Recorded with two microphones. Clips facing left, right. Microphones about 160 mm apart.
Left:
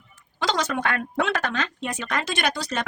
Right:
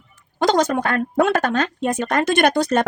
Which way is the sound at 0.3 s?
45° right (ahead or behind).